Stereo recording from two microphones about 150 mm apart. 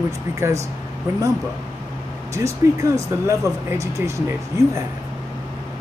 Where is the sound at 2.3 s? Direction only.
20° right (ahead or behind).